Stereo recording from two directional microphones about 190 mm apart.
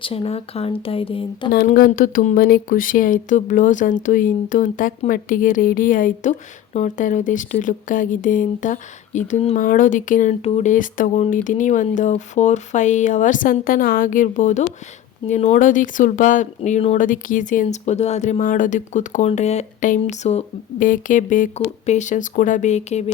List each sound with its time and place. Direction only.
0.0 s speech: 30° left (ahead or behind)
1.5 s speech: 50° left (ahead or behind)